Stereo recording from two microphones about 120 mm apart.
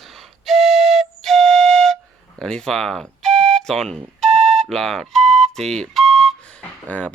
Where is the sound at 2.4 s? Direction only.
5° left (ahead or behind).